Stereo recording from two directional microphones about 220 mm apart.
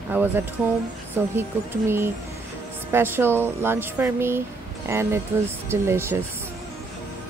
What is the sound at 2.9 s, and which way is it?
A woman's voice, 10° right (ahead or behind).